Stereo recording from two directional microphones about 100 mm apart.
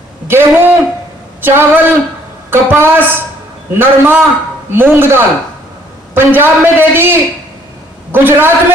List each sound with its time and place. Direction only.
0.3 s a man's voice: 20° right (ahead or behind)